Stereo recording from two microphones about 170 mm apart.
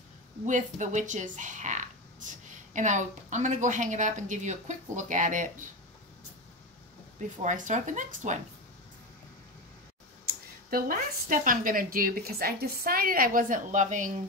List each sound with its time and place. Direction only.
0.5 s a woman's voice: 45° right (ahead or behind)
7.4 s a woman's voice: 50° right (ahead or behind)
10.2 s speech: 55° right (ahead or behind)